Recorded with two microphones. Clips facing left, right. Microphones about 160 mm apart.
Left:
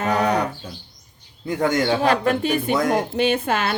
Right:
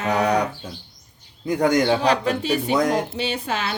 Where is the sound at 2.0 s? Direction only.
50° left (ahead or behind).